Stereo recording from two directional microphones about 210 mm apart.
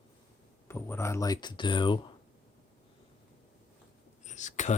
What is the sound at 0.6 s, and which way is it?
Speech, 10° left (ahead or behind).